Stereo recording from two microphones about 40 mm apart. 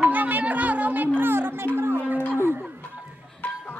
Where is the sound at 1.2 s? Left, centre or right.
Right.